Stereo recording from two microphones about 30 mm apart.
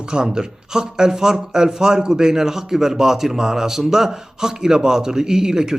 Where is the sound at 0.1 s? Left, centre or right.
Right.